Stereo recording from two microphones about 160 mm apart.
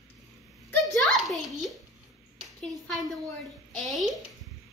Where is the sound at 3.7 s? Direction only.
Centre (ahead or behind).